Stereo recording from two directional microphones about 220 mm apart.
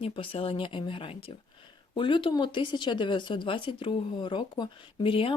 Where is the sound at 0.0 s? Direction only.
25° left (ahead or behind).